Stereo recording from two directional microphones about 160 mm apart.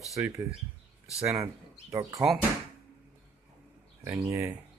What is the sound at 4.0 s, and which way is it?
Speech, 20° right (ahead or behind).